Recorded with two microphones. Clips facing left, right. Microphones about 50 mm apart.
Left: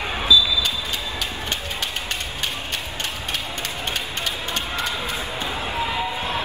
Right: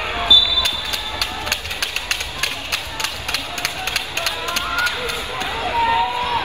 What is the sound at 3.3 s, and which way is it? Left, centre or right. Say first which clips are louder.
Run: right 3 dB; right.